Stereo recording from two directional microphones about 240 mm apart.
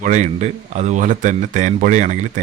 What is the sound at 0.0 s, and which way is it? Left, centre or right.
Speech, right.